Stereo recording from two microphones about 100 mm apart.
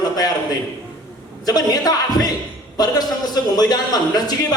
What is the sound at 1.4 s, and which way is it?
A man's voice, 40° left (ahead or behind).